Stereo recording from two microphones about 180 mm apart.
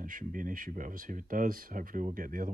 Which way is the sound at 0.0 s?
50° right (ahead or behind).